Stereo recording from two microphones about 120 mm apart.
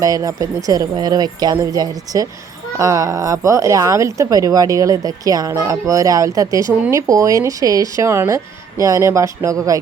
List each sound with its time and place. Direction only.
0.0 s speech: 30° right (ahead or behind)